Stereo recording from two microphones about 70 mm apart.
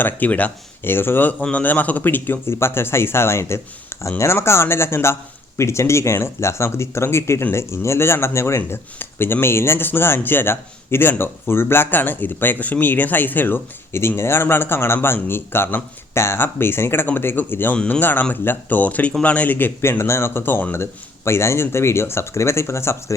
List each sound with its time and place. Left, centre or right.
0.0 s speech: left
0.9 s speech: left
21.2 s speech: left